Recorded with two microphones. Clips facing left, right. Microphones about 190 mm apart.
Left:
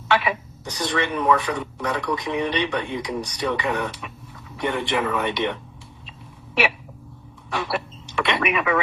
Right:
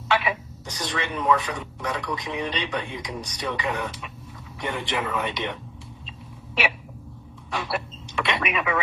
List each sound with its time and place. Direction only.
0.1 s speech: 60° left (ahead or behind)
7.5 s speech: 60° left (ahead or behind)